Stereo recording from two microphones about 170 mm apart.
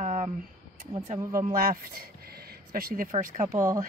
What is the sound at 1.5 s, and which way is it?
A woman's voice, 60° right (ahead or behind).